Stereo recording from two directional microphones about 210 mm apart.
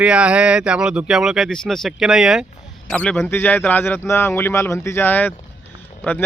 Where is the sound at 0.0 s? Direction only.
5° right (ahead or behind).